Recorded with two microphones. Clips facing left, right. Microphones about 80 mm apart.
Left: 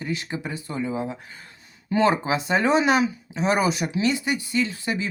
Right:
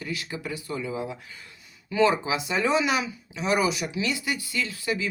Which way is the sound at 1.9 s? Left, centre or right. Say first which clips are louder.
Left 2 dB; left.